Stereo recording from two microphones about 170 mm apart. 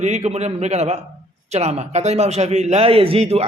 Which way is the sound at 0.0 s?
40° right (ahead or behind).